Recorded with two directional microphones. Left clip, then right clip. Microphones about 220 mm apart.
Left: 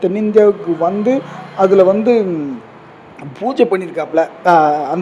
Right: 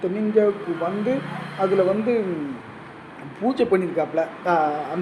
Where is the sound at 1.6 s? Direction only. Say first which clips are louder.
Left 10 dB; 40° left (ahead or behind).